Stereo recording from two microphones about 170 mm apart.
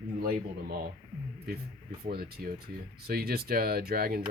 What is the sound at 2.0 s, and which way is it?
Speech, 60° right (ahead or behind).